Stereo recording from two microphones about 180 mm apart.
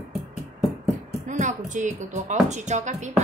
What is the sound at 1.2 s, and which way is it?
Speech, 45° right (ahead or behind).